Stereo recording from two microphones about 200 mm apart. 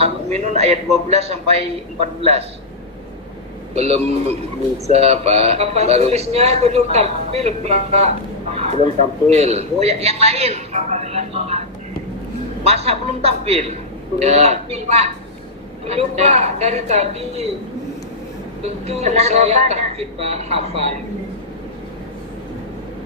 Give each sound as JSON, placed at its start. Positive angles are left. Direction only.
{"t": 0.0, "sound": "a man's voice", "side_deg": -35}
{"t": 3.8, "sound": "a man's voice", "side_deg": -30}
{"t": 12.6, "sound": "a man's voice", "side_deg": -30}
{"t": 18.6, "sound": "a man's voice", "side_deg": -30}